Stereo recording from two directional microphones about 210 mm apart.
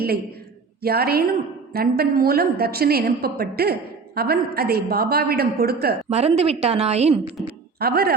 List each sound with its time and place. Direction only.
0.8 s a woman's voice: 45° right (ahead or behind)
6.1 s a woman's voice: 30° right (ahead or behind)
7.8 s a woman's voice: 45° right (ahead or behind)